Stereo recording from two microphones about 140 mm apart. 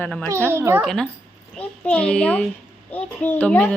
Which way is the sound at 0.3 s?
20° right (ahead or behind).